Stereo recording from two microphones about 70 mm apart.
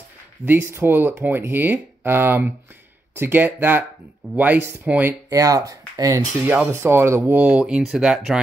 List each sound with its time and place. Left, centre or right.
0.7 s speech: right
5.3 s speech: right
6.4 s speech: right; by 7.8 s centre
7.8 s speech: centre